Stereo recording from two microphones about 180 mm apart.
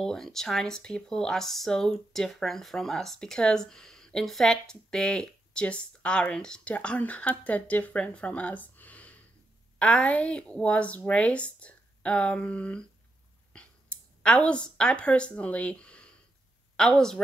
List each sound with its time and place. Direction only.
0.0 s a woman's voice: 5° left (ahead or behind)
13.5 s a sound: 5° left (ahead or behind)
16.7 s speech: 5° left (ahead or behind)